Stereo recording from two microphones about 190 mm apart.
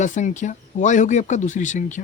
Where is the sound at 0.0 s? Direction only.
40° left (ahead or behind).